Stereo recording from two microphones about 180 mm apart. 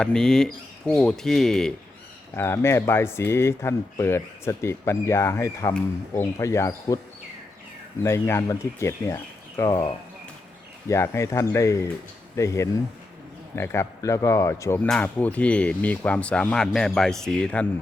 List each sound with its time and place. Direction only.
0.0 s speech: 5° left (ahead or behind)
2.3 s speech: 15° left (ahead or behind)
8.0 s speech: 15° left (ahead or behind)